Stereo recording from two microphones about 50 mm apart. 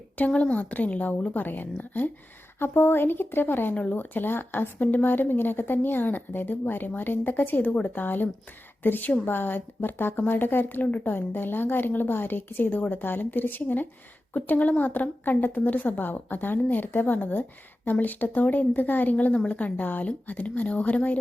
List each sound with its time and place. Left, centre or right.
0.2 s a woman's voice: left
19.3 s speech: left